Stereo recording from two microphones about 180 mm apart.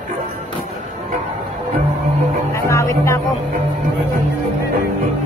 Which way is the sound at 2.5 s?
15° left (ahead or behind).